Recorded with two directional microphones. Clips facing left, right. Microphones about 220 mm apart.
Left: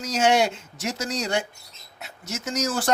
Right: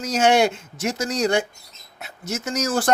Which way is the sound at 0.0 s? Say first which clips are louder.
Right 3 dB; 55° right (ahead or behind).